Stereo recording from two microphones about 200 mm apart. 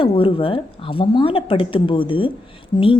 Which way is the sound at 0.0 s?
25° left (ahead or behind).